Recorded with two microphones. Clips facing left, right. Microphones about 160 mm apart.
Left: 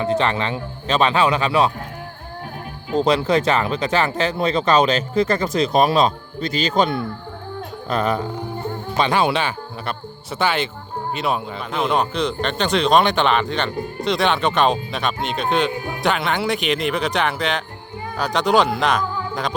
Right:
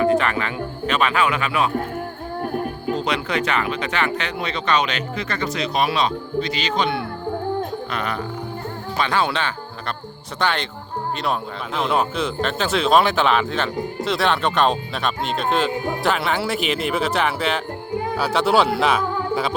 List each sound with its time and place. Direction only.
0.0 s speech: 25° left (ahead or behind)
2.4 s music: 50° right (ahead or behind)
2.9 s speech: 35° left (ahead or behind)
9.0 s speech: 15° left (ahead or behind); by 19.5 s 5° right (ahead or behind)